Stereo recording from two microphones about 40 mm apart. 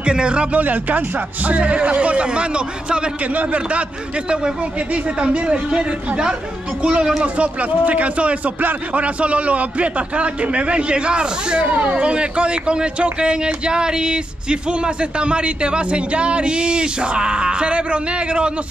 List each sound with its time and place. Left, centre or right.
0.0 s speech: right
0.6 s speech: right
4.3 s speech: right
11.6 s speech: right
12.0 s speech: right